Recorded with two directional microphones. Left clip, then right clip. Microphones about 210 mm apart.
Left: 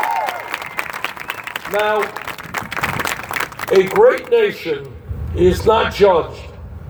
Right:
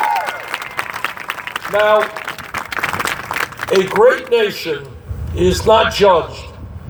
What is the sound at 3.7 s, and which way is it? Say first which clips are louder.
Speech: even; 15° right (ahead or behind).